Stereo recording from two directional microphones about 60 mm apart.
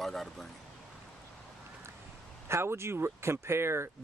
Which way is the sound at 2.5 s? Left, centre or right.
Right.